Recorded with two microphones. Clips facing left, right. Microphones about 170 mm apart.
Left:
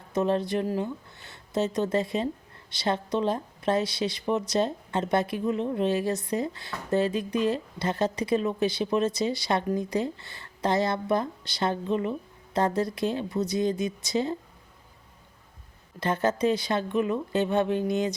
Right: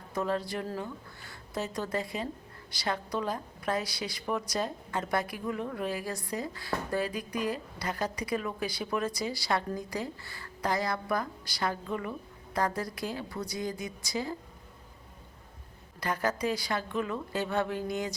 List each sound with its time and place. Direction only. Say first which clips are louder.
0.1 s speech: left 6 dB; 20° left (ahead or behind)
16.0 s speech: left 6 dB; 25° left (ahead or behind)